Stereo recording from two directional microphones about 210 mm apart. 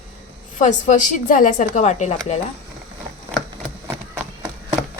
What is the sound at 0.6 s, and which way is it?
A woman's voice, 35° left (ahead or behind).